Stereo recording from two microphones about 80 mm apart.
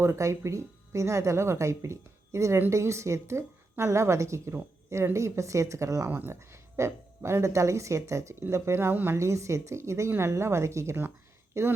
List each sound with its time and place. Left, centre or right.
0.0 s speech: right
6.1 s speech: right
9.1 s speech: right